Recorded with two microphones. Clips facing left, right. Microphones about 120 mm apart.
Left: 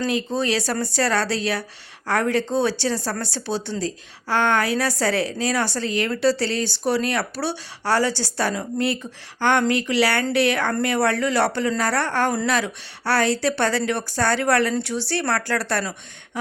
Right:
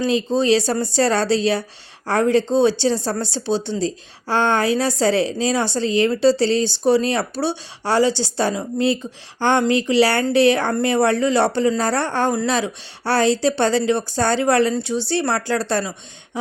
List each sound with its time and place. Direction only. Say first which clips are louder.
0.0 s speech: right 5 dB; 25° right (ahead or behind)